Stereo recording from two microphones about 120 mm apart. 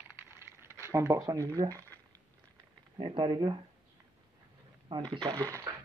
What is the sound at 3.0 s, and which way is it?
Speech, 40° right (ahead or behind).